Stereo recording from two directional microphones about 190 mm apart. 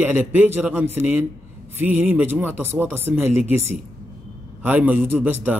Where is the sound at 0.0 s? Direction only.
10° right (ahead or behind).